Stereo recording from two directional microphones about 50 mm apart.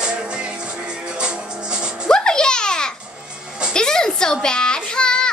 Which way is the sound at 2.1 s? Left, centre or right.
Centre.